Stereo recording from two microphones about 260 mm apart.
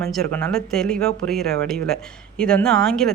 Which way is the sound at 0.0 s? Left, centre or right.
Centre.